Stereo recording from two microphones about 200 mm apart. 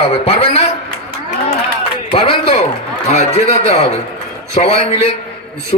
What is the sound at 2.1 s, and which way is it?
A man's voice, 30° left (ahead or behind).